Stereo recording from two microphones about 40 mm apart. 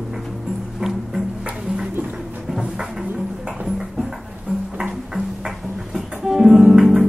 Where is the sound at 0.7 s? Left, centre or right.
Centre.